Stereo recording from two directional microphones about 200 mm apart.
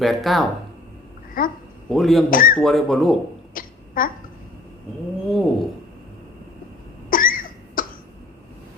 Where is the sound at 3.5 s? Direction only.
45° left (ahead or behind).